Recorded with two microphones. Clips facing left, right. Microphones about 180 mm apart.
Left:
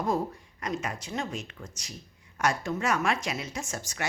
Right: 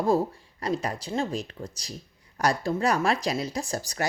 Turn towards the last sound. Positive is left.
turn(degrees=-35)  # may be behind; listen again after turning